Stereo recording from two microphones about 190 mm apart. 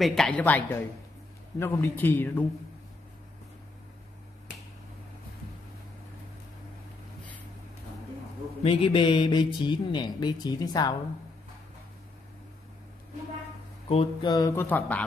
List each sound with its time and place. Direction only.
0.0 s speech: centre (ahead or behind)
8.6 s speech: 25° left (ahead or behind)
13.8 s speech: 25° left (ahead or behind); by 15.0 s 10° left (ahead or behind)